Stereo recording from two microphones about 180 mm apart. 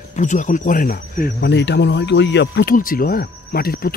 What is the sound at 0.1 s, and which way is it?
Speech, 45° left (ahead or behind).